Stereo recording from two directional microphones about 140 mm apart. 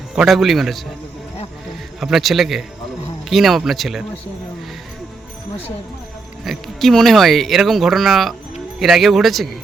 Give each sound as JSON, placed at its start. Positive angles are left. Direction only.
{"t": 0.2, "sound": "speech", "side_deg": 0}
{"t": 2.0, "sound": "speech", "side_deg": 0}
{"t": 6.4, "sound": "speech", "side_deg": 0}